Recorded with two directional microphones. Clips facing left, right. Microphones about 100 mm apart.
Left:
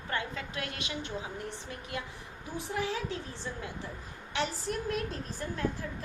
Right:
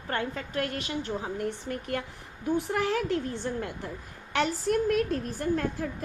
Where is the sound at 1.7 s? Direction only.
55° right (ahead or behind).